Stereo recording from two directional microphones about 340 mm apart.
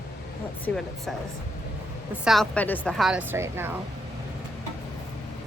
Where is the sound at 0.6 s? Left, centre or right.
Centre.